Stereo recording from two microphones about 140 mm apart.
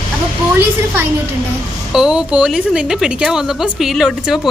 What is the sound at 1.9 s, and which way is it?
A woman's voice, 5° right (ahead or behind).